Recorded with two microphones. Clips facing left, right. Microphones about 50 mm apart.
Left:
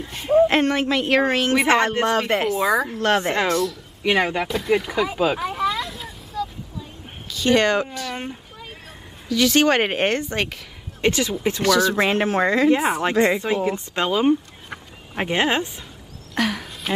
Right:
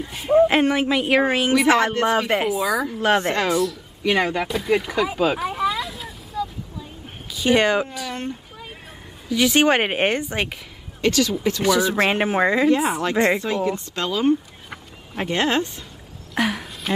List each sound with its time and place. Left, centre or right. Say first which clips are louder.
0.0 s speech: even; centre
4.0 s a sound: even; centre
7.3 s speech: even; centre
9.3 s speech: even; centre
11.0 s speech: right 1 dB; left
11.6 s speech: left 1 dB; centre
12.7 s speech: left 1 dB; left
16.3 s a sound: even; centre